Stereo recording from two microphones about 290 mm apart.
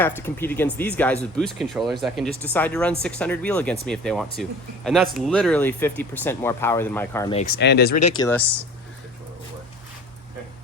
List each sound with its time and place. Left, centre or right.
0.0 s speech: centre
7.3 s speech: left
8.2 s speech: centre